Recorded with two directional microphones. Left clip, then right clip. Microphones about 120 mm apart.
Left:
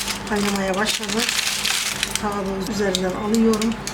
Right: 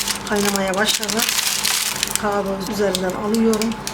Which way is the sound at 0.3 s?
25° right (ahead or behind).